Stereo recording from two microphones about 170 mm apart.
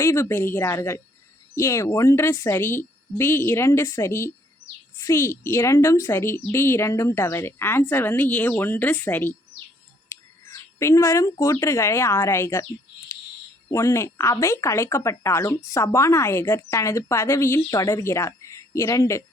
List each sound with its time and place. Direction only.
0.0 s speech: 15° left (ahead or behind)
10.8 s speech: 15° left (ahead or behind)
13.7 s speech: 15° left (ahead or behind)